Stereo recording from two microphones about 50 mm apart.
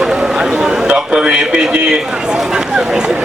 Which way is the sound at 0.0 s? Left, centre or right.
Centre.